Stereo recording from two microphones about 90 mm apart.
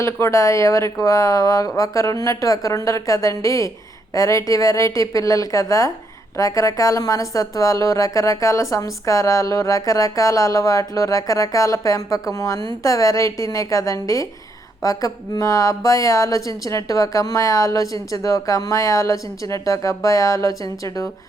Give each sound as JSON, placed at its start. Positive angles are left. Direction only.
{"t": 0.0, "sound": "a woman's voice", "side_deg": 35}